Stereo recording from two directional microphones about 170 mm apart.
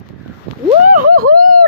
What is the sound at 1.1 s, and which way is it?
Speech, 55° right (ahead or behind).